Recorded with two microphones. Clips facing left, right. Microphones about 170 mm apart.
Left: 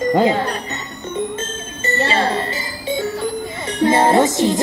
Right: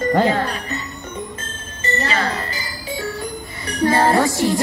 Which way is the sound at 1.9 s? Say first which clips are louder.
Left 4 dB; 30° left (ahead or behind).